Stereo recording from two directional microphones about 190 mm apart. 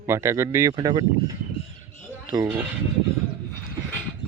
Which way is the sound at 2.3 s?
20° right (ahead or behind).